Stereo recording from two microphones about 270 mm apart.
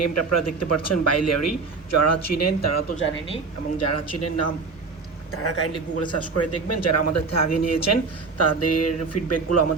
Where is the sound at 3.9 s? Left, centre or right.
Left.